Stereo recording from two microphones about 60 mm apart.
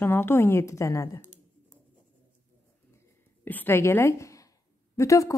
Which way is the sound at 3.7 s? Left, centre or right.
Left.